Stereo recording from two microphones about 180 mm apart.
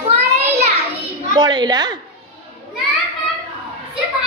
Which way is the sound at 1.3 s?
25° right (ahead or behind).